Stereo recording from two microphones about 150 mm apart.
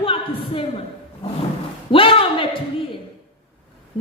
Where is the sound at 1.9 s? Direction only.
35° left (ahead or behind).